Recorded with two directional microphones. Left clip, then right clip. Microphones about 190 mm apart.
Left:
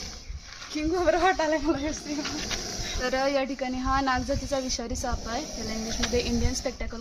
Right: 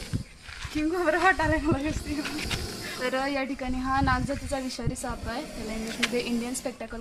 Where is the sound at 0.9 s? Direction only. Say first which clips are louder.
Even; 35° left (ahead or behind).